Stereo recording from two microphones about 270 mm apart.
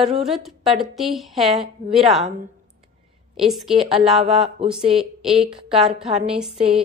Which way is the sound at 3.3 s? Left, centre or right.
Centre.